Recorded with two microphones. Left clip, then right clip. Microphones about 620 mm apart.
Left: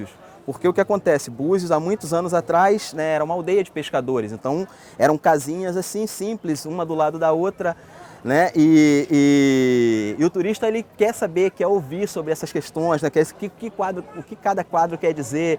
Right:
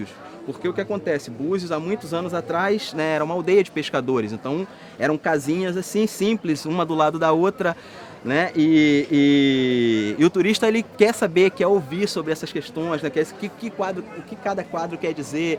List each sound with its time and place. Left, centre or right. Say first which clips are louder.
0.6 s speech: left 7 dB; left
3.0 s mantra: left 1 dB; left
6.7 s speech: right 1 dB; centre
8.3 s mantra: left 3 dB; left
12.5 s speech: left 5 dB; left
13.4 s mantra: left 2 dB; left
14.4 s speech: left 6 dB; left